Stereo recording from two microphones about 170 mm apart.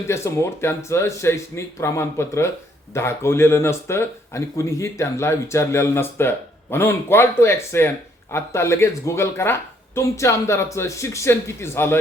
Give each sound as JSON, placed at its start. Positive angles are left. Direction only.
{"t": 0.1, "sound": "speech", "side_deg": 15}